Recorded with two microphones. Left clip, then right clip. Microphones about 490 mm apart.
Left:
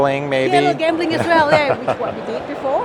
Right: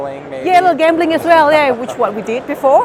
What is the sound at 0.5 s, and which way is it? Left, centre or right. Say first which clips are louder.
Speech: right 9 dB; right.